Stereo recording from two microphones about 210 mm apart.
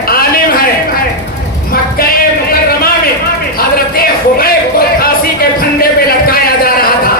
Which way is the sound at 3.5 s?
45° left (ahead or behind).